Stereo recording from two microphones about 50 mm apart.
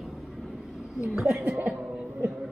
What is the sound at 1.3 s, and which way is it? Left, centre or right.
Speech, right.